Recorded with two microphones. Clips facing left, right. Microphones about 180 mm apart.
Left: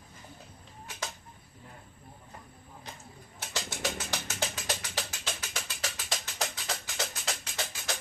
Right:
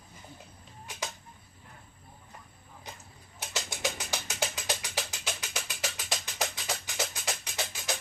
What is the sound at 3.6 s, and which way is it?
Music, 15° right (ahead or behind).